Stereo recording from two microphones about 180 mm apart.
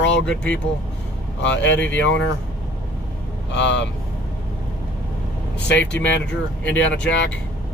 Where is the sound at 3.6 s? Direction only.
80° left.